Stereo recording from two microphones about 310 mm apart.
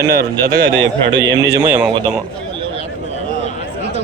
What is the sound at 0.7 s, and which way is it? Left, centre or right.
Speech, right.